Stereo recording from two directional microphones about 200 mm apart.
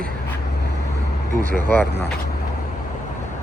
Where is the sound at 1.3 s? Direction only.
45° right (ahead or behind).